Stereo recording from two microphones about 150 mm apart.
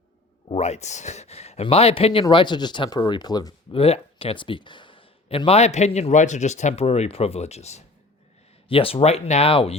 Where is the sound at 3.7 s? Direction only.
40° left (ahead or behind).